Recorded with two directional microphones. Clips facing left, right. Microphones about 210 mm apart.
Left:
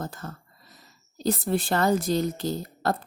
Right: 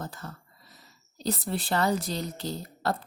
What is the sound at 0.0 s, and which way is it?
Speech, 45° left (ahead or behind).